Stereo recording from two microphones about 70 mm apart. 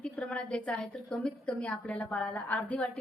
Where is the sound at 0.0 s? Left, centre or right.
Centre.